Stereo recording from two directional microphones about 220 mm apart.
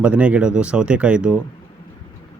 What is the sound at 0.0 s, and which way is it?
Speech, 5° right (ahead or behind).